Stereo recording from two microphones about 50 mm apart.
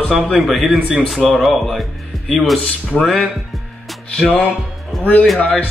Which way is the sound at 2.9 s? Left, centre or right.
Left.